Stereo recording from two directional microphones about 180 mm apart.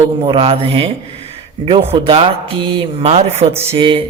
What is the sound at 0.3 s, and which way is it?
A man's voice, 30° right (ahead or behind).